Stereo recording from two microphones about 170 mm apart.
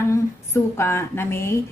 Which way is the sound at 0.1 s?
15° left (ahead or behind).